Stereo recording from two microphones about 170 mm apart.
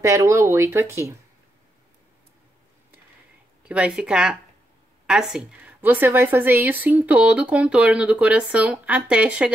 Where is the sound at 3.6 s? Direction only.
5° right (ahead or behind).